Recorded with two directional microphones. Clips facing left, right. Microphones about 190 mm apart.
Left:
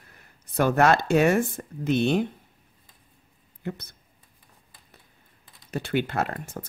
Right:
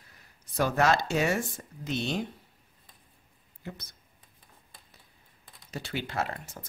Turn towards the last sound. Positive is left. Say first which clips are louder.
# left 4 dB
turn(degrees=55)  # may be behind; listen again after turning